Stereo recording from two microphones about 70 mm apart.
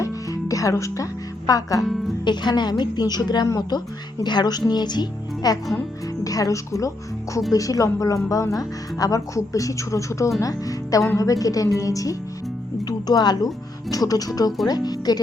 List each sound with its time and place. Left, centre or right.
0.0 s music: left
1.5 s a woman's voice: left
2.2 s a woman's voice: left
6.2 s a woman's voice: left
12.8 s music: left
13.9 s a woman's voice: left